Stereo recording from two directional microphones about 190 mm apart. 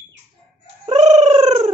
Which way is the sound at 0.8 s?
35° right (ahead or behind).